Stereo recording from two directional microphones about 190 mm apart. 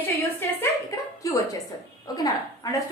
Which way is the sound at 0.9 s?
20° left (ahead or behind).